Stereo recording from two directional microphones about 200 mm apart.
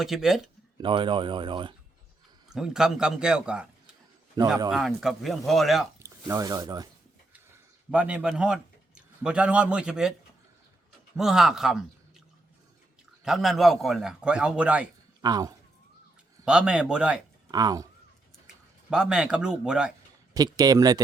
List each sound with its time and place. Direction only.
0.0 s a man's voice: centre (ahead or behind)
0.8 s speech: 25° right (ahead or behind)
2.5 s a man's voice: 5° right (ahead or behind)
6.2 s speech: 15° right (ahead or behind)
7.9 s a man's voice: 5° right (ahead or behind)
11.2 s a man's voice: centre (ahead or behind)
13.2 s a man's voice: centre (ahead or behind)
15.2 s speech: 20° right (ahead or behind)
16.5 s a man's voice: 5° right (ahead or behind)
17.5 s speech: 20° right (ahead or behind)
18.4 s speech: 5° right (ahead or behind)
20.3 s speech: 20° right (ahead or behind)